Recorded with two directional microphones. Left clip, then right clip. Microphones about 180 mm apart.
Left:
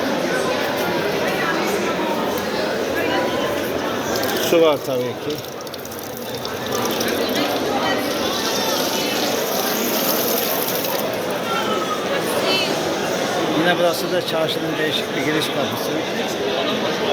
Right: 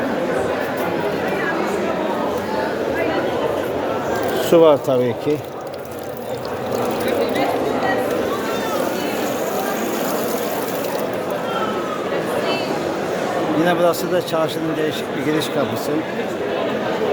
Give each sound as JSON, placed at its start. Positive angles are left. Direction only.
{"t": 4.5, "sound": "speech", "side_deg": -30}